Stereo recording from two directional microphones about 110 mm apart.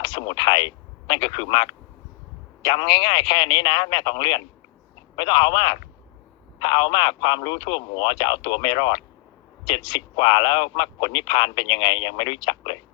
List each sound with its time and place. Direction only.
0.0 s a man's voice: 45° left (ahead or behind)